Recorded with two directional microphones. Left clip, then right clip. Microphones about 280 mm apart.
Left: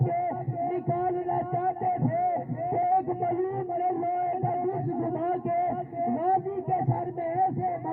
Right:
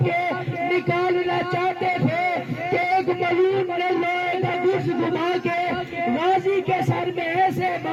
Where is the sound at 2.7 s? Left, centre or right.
Right.